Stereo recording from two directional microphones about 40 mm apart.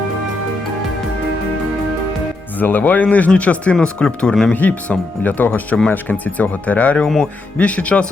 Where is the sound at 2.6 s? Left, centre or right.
Left.